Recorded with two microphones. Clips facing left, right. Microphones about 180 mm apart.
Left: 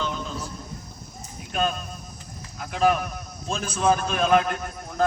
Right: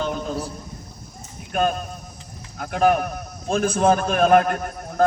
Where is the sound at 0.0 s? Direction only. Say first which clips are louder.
Right 5 dB; 55° right (ahead or behind).